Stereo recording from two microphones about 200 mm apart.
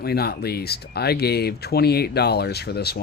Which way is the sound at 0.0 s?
50° left (ahead or behind).